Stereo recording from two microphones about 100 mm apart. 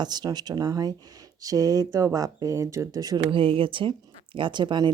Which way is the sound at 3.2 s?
65° right (ahead or behind).